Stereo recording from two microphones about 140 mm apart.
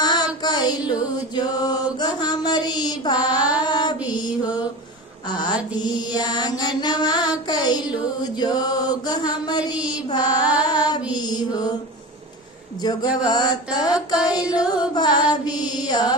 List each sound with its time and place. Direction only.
0.0 s child singing: 30° left (ahead or behind)
1.4 s music: 30° left (ahead or behind)
4.2 s mantra: 30° left (ahead or behind)
5.3 s music: 30° left (ahead or behind)
10.7 s female singing: 30° left (ahead or behind)
11.1 s mantra: 30° left (ahead or behind)
12.8 s music: 30° left (ahead or behind)
15.7 s mantra: 30° left (ahead or behind)